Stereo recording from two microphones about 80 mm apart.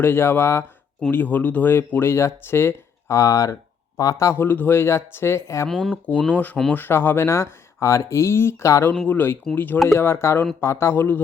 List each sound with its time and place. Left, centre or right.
0.0 s speech: left
4.4 s speech: left
5.6 s speech: centre
5.9 s speech: centre; by 8.8 s left
9.0 s speech: left